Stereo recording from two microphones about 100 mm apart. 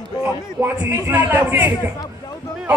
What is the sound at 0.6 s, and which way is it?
A man's voice, 20° right (ahead or behind).